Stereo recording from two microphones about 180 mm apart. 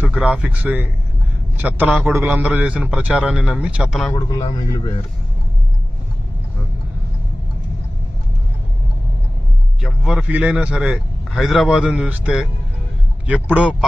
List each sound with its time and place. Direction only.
0.0 s a man's voice: 5° right (ahead or behind)
4.1 s a man's voice: 20° left (ahead or behind)
9.8 s a man's voice: 5° right (ahead or behind)